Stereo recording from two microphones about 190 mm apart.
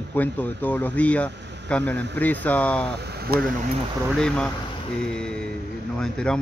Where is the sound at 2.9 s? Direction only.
55° right (ahead or behind).